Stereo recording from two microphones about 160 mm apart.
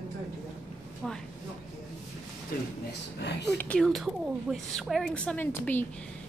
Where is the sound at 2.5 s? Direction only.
65° left (ahead or behind).